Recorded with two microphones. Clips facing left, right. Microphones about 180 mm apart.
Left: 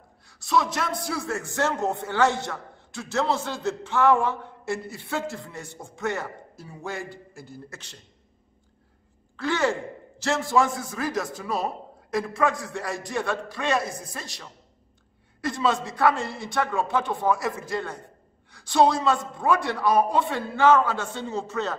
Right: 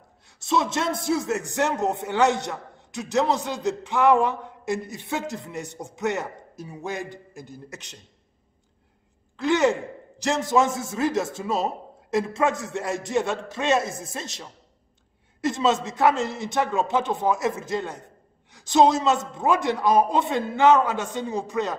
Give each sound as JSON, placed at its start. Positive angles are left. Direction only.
{"t": 0.3, "sound": "a man's voice", "side_deg": -25}
{"t": 9.4, "sound": "a man's voice", "side_deg": -20}